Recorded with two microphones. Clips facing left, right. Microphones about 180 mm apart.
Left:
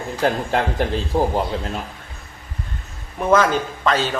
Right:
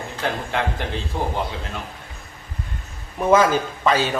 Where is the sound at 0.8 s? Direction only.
35° left (ahead or behind).